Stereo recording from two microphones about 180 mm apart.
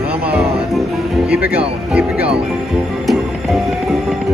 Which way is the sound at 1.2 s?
10° right (ahead or behind).